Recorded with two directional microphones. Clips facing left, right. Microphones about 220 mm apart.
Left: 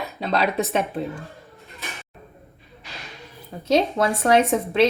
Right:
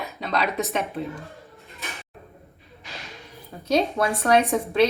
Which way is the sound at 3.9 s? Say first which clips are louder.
Left 2 dB; 25° left (ahead or behind).